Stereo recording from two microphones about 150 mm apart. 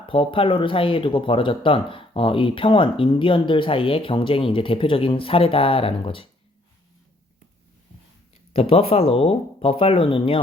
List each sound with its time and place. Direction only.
0.1 s speech: 35° left (ahead or behind)
8.5 s speech: 40° left (ahead or behind)